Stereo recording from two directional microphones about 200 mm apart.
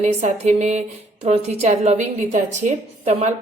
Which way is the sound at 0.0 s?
35° right (ahead or behind).